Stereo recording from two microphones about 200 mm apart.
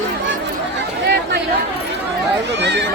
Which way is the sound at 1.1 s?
55° right (ahead or behind).